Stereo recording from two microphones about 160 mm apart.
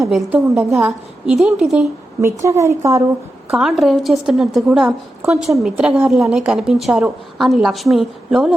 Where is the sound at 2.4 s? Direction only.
20° right (ahead or behind).